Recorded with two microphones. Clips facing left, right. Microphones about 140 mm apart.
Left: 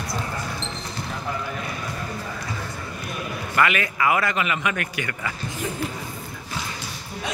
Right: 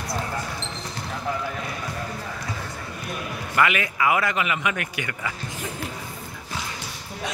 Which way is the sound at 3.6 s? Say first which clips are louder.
Even; 15° right (ahead or behind).